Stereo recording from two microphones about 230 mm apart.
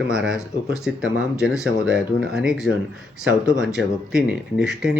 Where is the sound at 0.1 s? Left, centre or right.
Centre.